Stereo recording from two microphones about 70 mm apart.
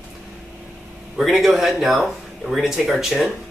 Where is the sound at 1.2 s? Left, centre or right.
Centre.